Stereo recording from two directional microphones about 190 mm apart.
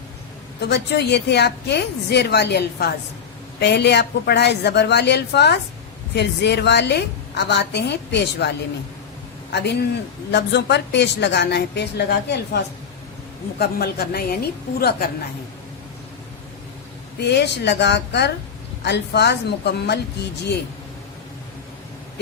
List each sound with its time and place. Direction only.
0.6 s a woman's voice: 60° left (ahead or behind)
17.2 s a woman's voice: 60° left (ahead or behind)